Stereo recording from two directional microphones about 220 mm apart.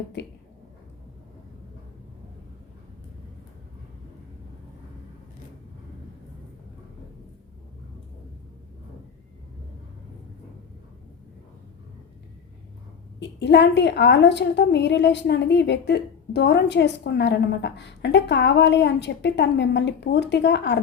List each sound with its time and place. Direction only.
13.1 s a woman's voice: 50° left (ahead or behind)